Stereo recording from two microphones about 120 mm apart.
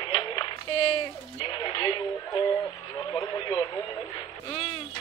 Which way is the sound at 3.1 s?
25° left (ahead or behind).